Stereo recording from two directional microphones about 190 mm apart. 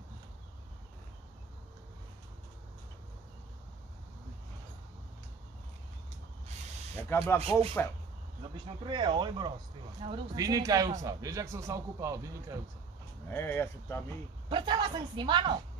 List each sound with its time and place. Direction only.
7.0 s speech: 15° left (ahead or behind)
8.8 s a woman's voice: 25° right (ahead or behind)
13.3 s speech: 10° left (ahead or behind)
14.5 s a woman's voice: 25° right (ahead or behind)